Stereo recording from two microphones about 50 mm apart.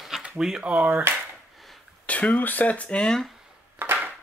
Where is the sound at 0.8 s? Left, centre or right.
Right.